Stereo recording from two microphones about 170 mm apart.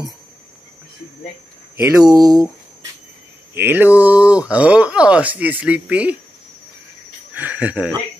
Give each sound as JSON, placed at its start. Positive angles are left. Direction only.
{"t": 2.0, "sound": "speech", "side_deg": -20}
{"t": 3.5, "sound": "speech", "side_deg": -10}
{"t": 7.3, "sound": "speech", "side_deg": -10}